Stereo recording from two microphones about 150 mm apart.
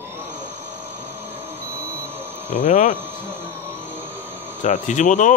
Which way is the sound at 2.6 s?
55° left (ahead or behind).